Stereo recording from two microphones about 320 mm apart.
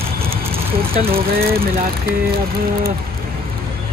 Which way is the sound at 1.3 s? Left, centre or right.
Right.